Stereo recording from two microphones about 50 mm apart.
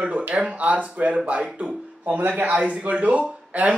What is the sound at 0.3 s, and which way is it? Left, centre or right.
Speech, right.